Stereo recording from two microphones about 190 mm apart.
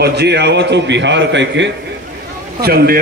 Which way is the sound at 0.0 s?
60° right (ahead or behind).